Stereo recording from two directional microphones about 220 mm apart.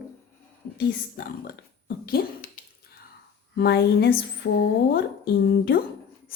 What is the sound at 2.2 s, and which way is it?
Speech, 40° left (ahead or behind).